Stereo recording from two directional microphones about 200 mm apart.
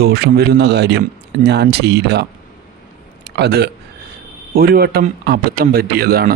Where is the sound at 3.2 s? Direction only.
55° right (ahead or behind).